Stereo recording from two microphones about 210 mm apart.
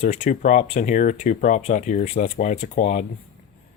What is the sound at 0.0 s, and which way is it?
Speech, 35° left (ahead or behind).